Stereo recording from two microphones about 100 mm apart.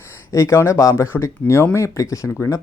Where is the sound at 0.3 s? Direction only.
30° left (ahead or behind).